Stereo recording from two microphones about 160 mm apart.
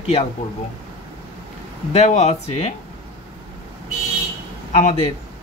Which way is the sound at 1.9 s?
45° left (ahead or behind).